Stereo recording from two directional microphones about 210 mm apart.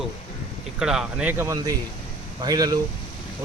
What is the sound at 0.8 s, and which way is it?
Speech, centre (ahead or behind).